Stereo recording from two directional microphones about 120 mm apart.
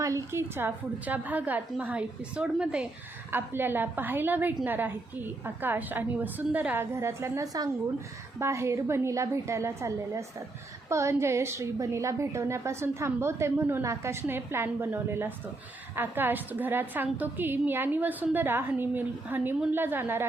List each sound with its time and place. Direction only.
0.0 s a woman's voice: 25° right (ahead or behind)